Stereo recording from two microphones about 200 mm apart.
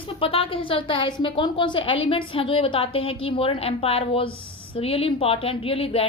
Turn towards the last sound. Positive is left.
turn(degrees=30)  # may be behind; listen again after turning